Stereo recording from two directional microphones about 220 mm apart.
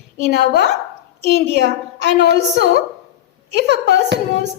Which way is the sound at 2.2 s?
50° right (ahead or behind).